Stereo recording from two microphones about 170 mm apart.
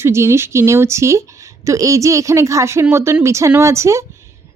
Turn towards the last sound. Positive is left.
turn(degrees=-15)  # may be behind; listen again after turning